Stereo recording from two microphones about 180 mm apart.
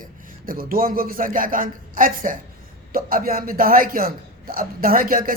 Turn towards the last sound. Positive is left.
turn(degrees=-50)  # may be behind; listen again after turning